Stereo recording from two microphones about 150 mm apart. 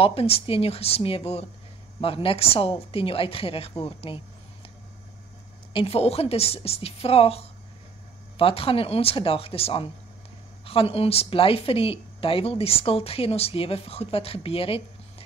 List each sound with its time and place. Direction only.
0.0 s a woman's voice: 40° left (ahead or behind)
5.7 s a woman's voice: 35° left (ahead or behind)